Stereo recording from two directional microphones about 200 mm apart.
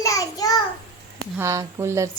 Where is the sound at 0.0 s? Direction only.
15° left (ahead or behind).